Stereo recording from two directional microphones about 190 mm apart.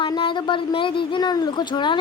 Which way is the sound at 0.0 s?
25° left (ahead or behind).